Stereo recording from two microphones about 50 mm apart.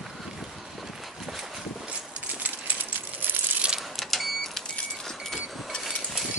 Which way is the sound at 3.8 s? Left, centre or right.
Centre.